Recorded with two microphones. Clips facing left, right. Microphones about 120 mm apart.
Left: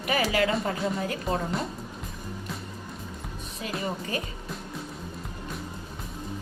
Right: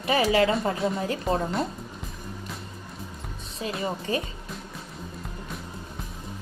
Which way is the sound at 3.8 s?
30° right (ahead or behind).